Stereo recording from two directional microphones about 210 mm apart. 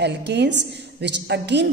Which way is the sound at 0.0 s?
55° right (ahead or behind).